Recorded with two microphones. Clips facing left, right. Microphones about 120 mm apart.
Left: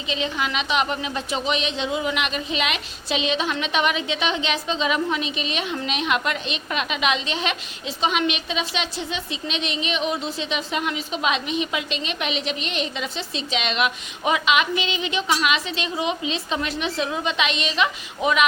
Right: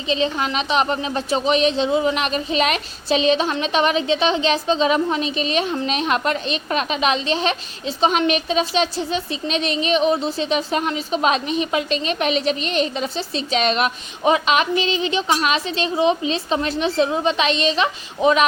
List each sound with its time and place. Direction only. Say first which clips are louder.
0.1 s speech: right 5 dB; 35° right (ahead or behind)